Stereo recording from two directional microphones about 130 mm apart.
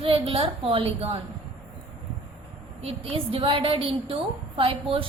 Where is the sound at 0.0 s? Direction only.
45° right (ahead or behind).